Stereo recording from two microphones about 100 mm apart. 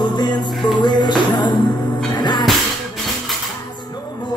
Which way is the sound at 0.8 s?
50° left (ahead or behind).